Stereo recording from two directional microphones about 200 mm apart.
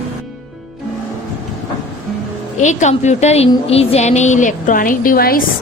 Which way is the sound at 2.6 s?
35° left (ahead or behind).